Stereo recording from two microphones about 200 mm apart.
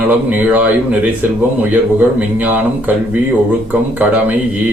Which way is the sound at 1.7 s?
10° right (ahead or behind).